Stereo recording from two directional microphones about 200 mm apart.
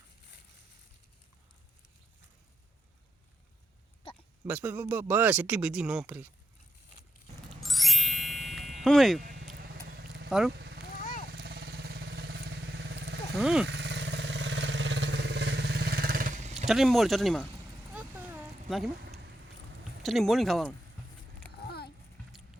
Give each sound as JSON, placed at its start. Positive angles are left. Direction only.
{"t": 4.4, "sound": "speech", "side_deg": -10}
{"t": 7.6, "sound": "music", "side_deg": 0}
{"t": 9.6, "sound": "vehicle", "side_deg": -50}
{"t": 10.2, "sound": "speech", "side_deg": 0}
{"t": 11.3, "sound": "vehicle", "side_deg": -50}
{"t": 13.3, "sound": "speech", "side_deg": 0}
{"t": 13.7, "sound": "vehicle", "side_deg": -60}
{"t": 16.6, "sound": "speech", "side_deg": 0}
{"t": 17.9, "sound": "a sound", "side_deg": -10}
{"t": 18.7, "sound": "speech", "side_deg": 0}
{"t": 20.0, "sound": "speech", "side_deg": 0}
{"t": 21.7, "sound": "a sound", "side_deg": 55}